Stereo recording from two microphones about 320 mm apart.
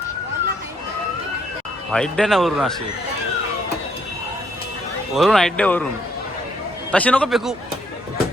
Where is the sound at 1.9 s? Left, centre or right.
Centre.